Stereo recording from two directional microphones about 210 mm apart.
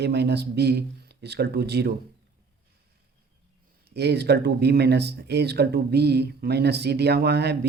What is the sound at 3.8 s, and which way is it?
Speech, 50° right (ahead or behind).